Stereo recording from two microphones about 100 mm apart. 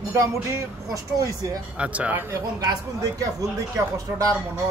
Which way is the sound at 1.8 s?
15° right (ahead or behind).